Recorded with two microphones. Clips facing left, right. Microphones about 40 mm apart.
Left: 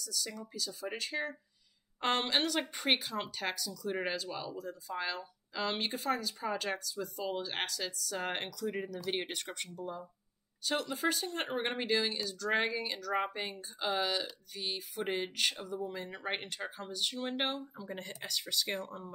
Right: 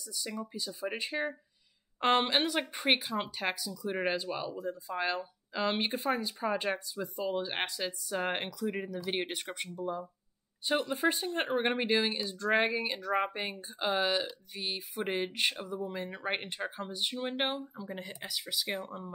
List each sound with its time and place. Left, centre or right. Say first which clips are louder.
0.0 s speech: right 2 dB; centre